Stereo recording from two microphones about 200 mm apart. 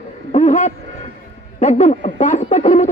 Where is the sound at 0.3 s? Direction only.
35° left (ahead or behind).